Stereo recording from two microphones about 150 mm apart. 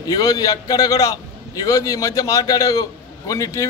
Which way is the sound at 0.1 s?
25° left (ahead or behind).